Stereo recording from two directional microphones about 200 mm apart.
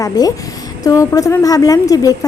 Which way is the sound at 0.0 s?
15° left (ahead or behind).